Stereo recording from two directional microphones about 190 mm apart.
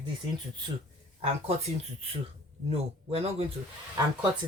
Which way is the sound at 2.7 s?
30° right (ahead or behind).